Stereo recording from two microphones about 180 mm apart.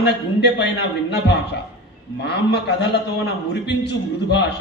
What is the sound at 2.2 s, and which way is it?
A man's voice, 70° left (ahead or behind).